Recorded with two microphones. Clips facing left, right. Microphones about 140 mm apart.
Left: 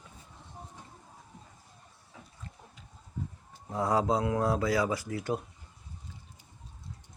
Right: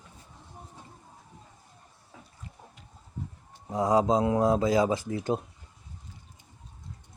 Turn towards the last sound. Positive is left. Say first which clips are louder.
# right 4 dB
turn(degrees=-25)  # may be behind; listen again after turning